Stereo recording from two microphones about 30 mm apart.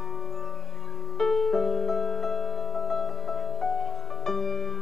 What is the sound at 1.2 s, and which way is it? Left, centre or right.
Music, centre.